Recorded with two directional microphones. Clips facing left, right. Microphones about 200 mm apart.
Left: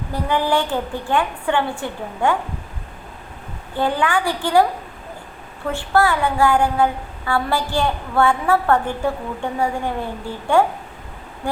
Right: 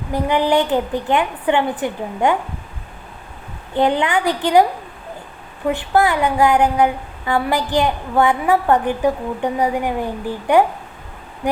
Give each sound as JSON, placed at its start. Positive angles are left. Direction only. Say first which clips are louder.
{"t": 0.1, "sound": "a woman's voice", "louder": "right 3 dB", "side_deg": -20}
{"t": 3.8, "sound": "a woman's voice", "louder": "right 3 dB", "side_deg": -20}
{"t": 5.6, "sound": "speech", "louder": "right 2 dB", "side_deg": -20}